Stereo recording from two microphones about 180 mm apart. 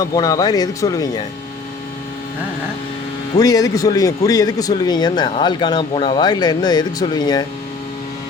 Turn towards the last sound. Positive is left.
turn(degrees=20)  # may be behind; listen again after turning